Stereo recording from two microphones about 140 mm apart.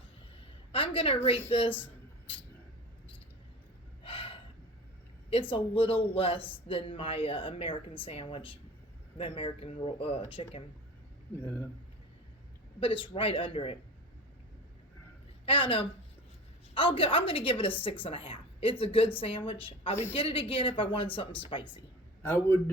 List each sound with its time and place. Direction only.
0.7 s a woman's voice: 40° left (ahead or behind)
4.0 s gasp: 40° left (ahead or behind)
5.3 s a woman's voice: 40° left (ahead or behind)
11.3 s a man's voice: 15° left (ahead or behind)
12.8 s a woman's voice: 40° left (ahead or behind)
15.4 s a woman's voice: 40° left (ahead or behind)
22.2 s a man's voice: 15° left (ahead or behind)